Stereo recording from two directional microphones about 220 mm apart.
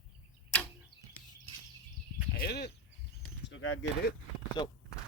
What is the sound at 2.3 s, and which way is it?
Speech, 45° left (ahead or behind).